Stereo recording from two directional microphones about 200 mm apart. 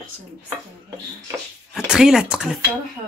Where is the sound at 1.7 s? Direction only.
5° right (ahead or behind).